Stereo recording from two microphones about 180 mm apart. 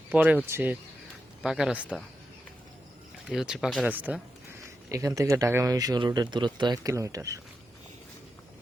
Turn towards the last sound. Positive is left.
turn(degrees=-20)  # may be behind; listen again after turning